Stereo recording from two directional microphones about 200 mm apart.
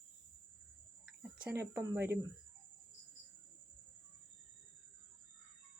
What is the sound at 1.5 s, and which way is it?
Speech, 15° right (ahead or behind).